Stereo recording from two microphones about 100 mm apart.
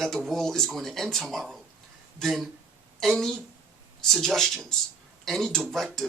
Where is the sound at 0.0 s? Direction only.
Centre (ahead or behind).